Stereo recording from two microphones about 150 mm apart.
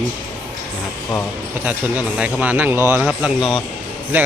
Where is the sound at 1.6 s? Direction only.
10° right (ahead or behind).